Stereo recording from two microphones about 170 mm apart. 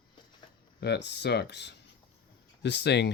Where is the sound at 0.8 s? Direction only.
80° left.